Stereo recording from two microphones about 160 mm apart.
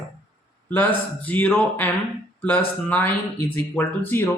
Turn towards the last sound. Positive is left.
turn(degrees=10)  # may be behind; listen again after turning